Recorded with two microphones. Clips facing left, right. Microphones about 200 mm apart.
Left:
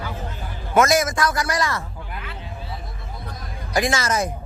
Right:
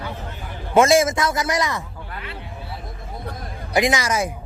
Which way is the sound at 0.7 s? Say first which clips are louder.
Right 3 dB; 25° right (ahead or behind).